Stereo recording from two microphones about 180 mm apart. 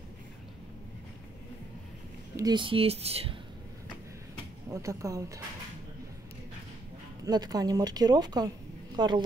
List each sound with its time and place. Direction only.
2.3 s speech: 25° right (ahead or behind)
4.8 s speech: 15° right (ahead or behind)
7.2 s speech: 20° right (ahead or behind)